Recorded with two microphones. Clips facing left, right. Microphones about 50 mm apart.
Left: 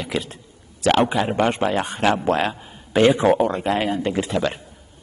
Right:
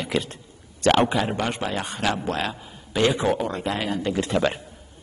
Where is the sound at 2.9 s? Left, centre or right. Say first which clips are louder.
Left 6 dB; left.